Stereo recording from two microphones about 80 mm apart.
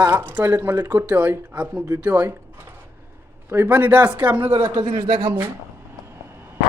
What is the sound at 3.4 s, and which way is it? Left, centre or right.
Speech, right.